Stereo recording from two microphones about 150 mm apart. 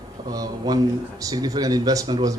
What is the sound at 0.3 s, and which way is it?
A man's voice, 25° right (ahead or behind).